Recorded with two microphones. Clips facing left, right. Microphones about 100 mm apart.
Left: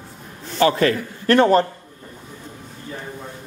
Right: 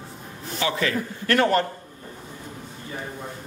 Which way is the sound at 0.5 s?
45° left (ahead or behind).